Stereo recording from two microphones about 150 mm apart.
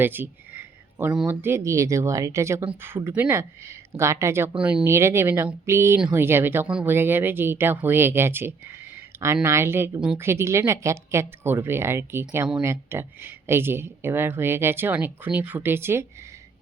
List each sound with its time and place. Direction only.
0.0 s a sound: 15° right (ahead or behind)
1.1 s speech: 5° right (ahead or behind)
1.4 s speech: 15° right (ahead or behind)